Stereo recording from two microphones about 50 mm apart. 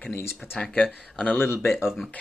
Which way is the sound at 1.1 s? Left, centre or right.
Left.